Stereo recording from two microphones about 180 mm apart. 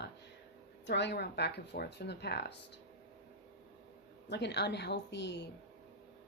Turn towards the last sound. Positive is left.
turn(degrees=75)  # may be behind; listen again after turning